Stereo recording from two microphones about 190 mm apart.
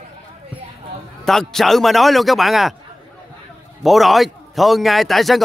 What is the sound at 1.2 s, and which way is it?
A man's voice, centre (ahead or behind).